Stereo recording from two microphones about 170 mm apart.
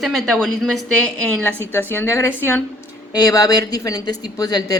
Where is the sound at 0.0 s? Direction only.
Centre (ahead or behind).